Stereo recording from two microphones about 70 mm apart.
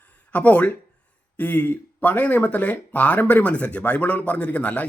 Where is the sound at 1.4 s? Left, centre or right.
Left.